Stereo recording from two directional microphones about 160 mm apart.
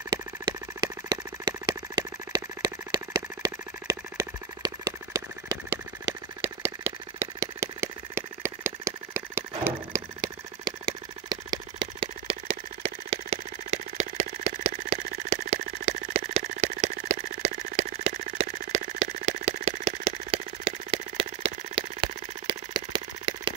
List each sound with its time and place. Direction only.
0.1 s vehicle: 25° right (ahead or behind)
2.0 s engine: 25° right (ahead or behind); by 15.3 s 45° right (ahead or behind)
15.5 s a sound: 40° right (ahead or behind)